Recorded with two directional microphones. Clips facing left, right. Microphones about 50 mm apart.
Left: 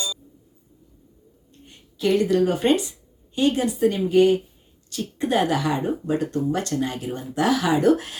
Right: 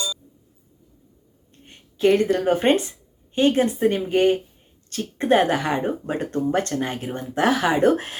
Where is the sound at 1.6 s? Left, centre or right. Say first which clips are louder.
Right 4 dB; right.